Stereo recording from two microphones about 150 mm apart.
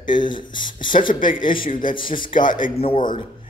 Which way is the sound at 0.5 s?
65° left (ahead or behind).